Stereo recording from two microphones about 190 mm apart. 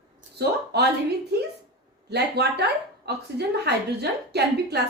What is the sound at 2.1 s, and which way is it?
Speech, 60° right (ahead or behind).